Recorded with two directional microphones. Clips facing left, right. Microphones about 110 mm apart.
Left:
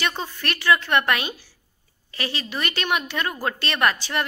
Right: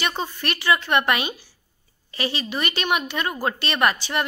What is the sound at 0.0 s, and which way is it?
Speech, 10° right (ahead or behind).